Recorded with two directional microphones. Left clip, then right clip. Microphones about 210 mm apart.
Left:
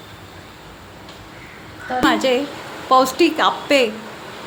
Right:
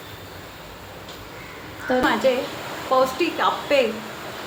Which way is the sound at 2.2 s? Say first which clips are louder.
Left 2 dB; 55° left (ahead or behind).